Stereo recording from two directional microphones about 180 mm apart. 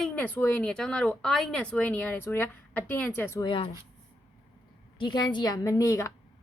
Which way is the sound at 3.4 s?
30° left (ahead or behind).